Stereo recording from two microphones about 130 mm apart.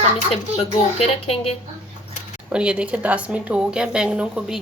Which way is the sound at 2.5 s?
10° right (ahead or behind).